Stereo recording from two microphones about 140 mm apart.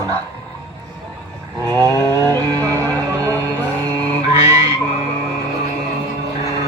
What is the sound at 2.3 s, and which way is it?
Music, 25° right (ahead or behind).